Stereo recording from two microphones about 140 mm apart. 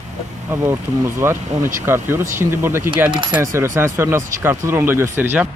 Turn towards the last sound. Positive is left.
turn(degrees=-15)  # may be behind; listen again after turning